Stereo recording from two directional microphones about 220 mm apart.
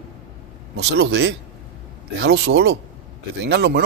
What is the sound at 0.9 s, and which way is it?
Speech, 50° right (ahead or behind).